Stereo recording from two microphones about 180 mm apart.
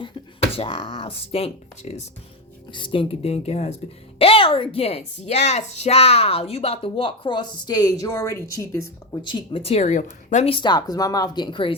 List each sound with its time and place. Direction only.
0.5 s a woman's voice: 30° left (ahead or behind)
9.2 s a woman's voice: 30° left (ahead or behind)